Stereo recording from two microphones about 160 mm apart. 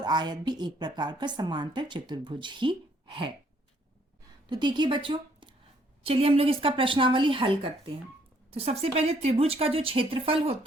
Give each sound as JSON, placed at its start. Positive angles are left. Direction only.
{"t": 0.0, "sound": "a woman's voice", "side_deg": -25}
{"t": 4.4, "sound": "a woman's voice", "side_deg": -30}